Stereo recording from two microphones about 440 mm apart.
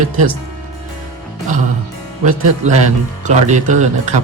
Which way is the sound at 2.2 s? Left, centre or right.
Centre.